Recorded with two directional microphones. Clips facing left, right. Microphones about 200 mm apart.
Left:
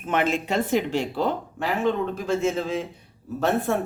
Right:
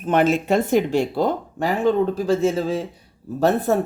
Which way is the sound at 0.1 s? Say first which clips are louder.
Right 6 dB; 40° right (ahead or behind).